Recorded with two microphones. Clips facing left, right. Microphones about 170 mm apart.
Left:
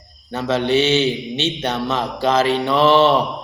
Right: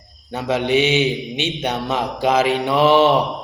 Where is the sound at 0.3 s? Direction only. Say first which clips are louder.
Left 1 dB; 15° right (ahead or behind).